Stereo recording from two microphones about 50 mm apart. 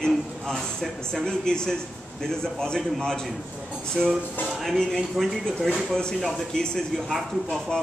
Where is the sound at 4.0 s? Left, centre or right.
Centre.